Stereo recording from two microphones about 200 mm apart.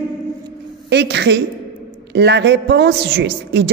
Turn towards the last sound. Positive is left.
turn(degrees=-55)  # may be behind; listen again after turning